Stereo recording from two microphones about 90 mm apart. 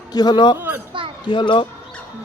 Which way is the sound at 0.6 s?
20° right (ahead or behind).